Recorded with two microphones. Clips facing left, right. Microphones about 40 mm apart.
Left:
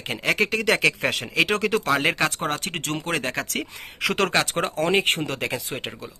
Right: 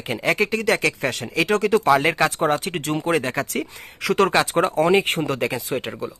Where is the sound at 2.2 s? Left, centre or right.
Centre.